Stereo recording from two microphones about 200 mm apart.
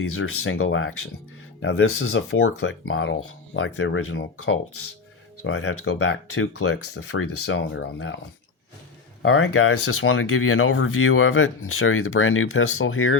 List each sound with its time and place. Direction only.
0.1 s speech: 90° left
1.6 s speech: 60° left (ahead or behind); by 4.6 s 90° left
5.4 s speech: 70° left (ahead or behind)
9.2 s speech: 85° left